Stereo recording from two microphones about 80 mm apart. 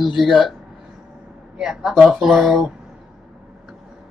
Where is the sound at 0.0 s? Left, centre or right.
Centre.